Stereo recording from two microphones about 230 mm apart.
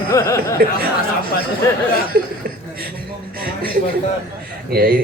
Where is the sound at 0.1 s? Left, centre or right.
Centre.